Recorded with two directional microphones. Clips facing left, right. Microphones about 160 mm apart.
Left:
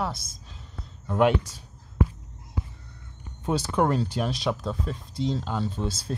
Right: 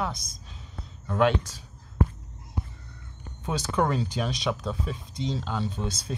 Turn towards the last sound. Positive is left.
turn(degrees=5)  # may be behind; listen again after turning